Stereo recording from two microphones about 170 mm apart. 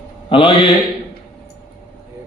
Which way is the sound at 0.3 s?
30° left (ahead or behind).